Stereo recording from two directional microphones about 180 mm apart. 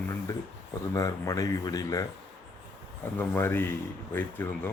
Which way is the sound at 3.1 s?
10° left (ahead or behind).